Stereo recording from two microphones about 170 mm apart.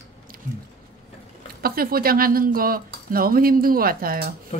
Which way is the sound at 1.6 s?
60° right (ahead or behind).